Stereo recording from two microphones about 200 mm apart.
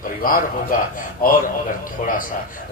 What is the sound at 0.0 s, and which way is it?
A man's voice, 45° left (ahead or behind).